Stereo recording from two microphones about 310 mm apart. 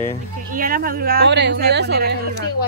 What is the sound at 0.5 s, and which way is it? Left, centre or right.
Speech, right.